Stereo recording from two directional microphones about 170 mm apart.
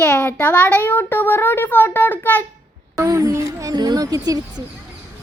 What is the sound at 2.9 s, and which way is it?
A child's voice, 20° right (ahead or behind).